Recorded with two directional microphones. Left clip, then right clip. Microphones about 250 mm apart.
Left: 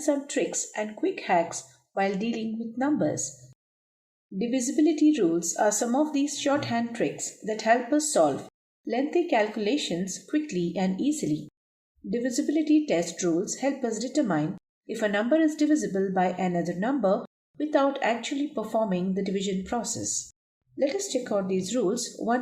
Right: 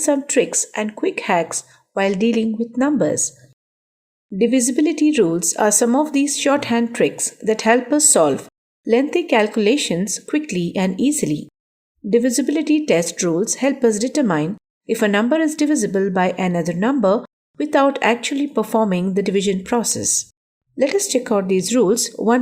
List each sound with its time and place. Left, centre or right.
0.0 s speech: right
4.4 s speech: right